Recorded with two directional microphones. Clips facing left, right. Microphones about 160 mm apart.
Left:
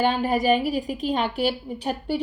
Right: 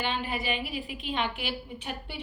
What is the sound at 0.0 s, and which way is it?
A woman's voice, 40° left (ahead or behind).